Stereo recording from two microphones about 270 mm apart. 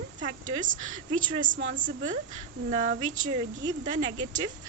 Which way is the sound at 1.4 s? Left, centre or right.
Right.